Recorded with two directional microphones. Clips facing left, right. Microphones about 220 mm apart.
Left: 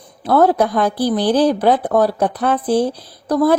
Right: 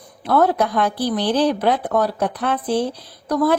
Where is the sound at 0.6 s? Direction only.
45° left (ahead or behind).